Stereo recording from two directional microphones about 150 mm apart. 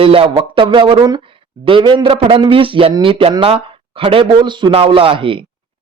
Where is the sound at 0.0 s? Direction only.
35° right (ahead or behind).